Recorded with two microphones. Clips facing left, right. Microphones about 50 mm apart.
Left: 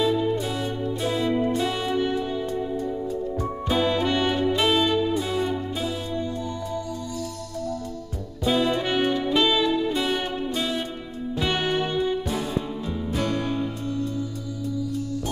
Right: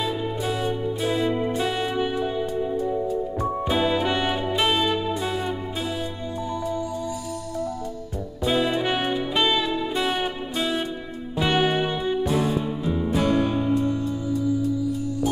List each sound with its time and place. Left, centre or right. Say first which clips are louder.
0.0 s music: left 4 dB; centre
8.5 s music: even; centre